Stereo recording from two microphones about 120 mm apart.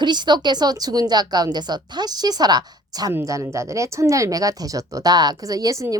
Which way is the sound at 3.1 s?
25° right (ahead or behind).